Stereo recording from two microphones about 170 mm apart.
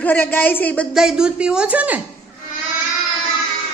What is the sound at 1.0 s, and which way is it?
Speech, 5° right (ahead or behind).